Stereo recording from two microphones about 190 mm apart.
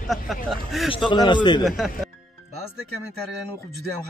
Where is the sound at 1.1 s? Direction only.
25° left (ahead or behind).